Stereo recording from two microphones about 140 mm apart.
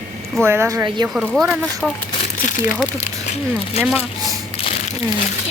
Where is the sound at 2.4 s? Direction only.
70° left (ahead or behind).